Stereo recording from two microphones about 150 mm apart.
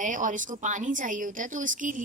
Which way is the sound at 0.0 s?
60° right (ahead or behind).